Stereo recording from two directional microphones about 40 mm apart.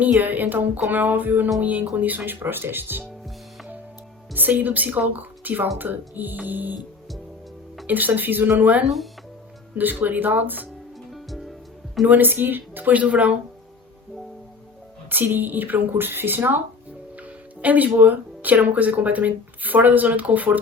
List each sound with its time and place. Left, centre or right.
0.2 s speech: right
4.4 s speech: right
7.9 s speech: right
11.1 s music: centre
12.0 s speech: right
12.9 s speech: right
15.1 s speech: right
17.2 s music: right
18.0 s speech: right